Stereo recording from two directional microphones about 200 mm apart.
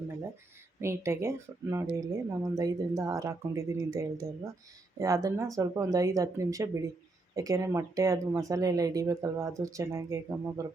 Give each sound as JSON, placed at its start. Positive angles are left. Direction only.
{"t": 0.8, "sound": "speech", "side_deg": -15}